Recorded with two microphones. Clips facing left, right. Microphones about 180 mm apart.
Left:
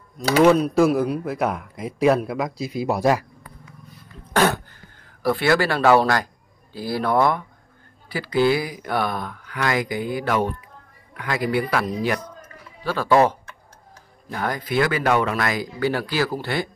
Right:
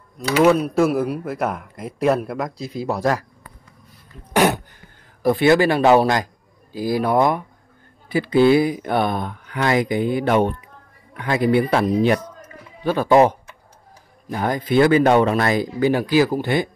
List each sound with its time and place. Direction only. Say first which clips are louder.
0.4 s speech: even; 5° right (ahead or behind); by 3.3 s 10° left (ahead or behind)
4.3 s throat clearing: right 2 dB; 15° right (ahead or behind)
5.2 s speech: right 5 dB; 20° right (ahead or behind)